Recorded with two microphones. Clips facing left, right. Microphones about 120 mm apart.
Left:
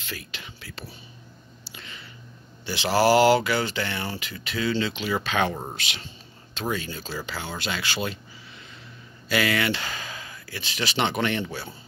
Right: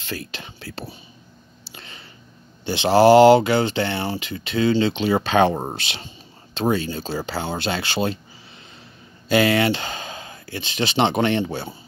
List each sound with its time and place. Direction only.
0.0 s speech: 35° right (ahead or behind)
1.6 s a sound: 30° right (ahead or behind)
2.6 s speech: 25° right (ahead or behind)
9.3 s speech: 30° right (ahead or behind)